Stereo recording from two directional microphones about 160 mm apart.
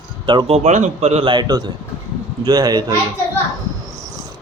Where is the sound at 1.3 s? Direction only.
25° right (ahead or behind).